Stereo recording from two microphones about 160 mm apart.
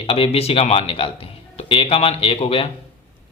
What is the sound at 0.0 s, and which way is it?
Speech, 40° left (ahead or behind).